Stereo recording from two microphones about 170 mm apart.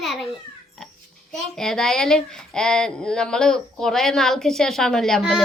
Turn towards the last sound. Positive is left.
turn(degrees=0)  # may be behind; listen again after turning